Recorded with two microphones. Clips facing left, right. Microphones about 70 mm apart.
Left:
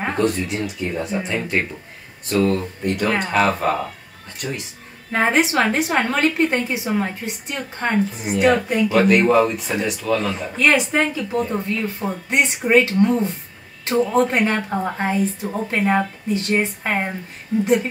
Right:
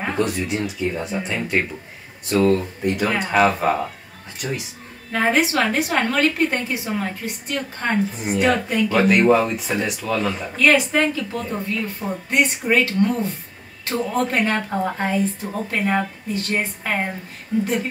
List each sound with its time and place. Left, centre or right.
0.0 s speech: centre
5.1 s a woman's voice: left
8.2 s speech: centre
8.9 s speech: centre
10.5 s a woman's voice: left
14.3 s a woman's voice: centre